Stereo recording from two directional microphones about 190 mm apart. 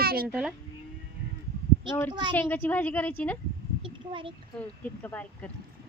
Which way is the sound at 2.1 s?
25° right (ahead or behind).